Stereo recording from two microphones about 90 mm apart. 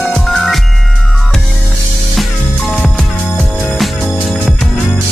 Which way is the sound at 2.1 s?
5° left (ahead or behind).